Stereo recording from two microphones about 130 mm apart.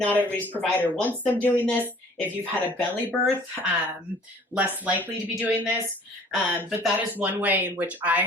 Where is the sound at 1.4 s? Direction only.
15° left (ahead or behind).